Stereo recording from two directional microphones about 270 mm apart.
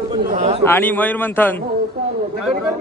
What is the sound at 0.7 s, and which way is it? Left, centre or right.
Speech, centre.